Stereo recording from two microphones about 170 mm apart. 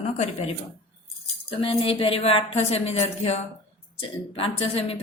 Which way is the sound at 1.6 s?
35° left (ahead or behind).